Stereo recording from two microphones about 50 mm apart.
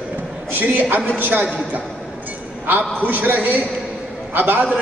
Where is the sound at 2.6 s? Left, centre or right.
Right.